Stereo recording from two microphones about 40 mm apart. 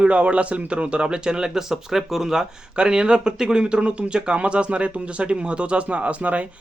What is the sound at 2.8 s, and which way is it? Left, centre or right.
Speech, right.